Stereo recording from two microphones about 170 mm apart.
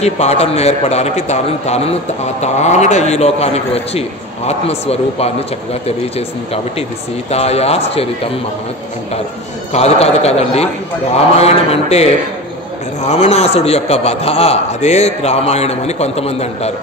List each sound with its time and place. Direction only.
0.0 s a man's voice: 40° left (ahead or behind)
9.7 s a man's voice: 40° left (ahead or behind)